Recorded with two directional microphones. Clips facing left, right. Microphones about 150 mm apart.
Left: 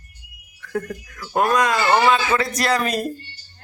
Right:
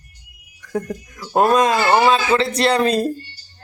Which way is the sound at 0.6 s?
20° right (ahead or behind).